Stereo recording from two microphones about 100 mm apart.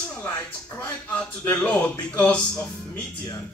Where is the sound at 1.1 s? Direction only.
15° left (ahead or behind).